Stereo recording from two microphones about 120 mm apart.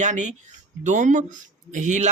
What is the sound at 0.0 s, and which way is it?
Speech, 90° right.